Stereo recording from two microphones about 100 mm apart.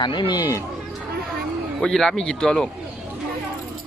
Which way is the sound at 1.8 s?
5° left (ahead or behind).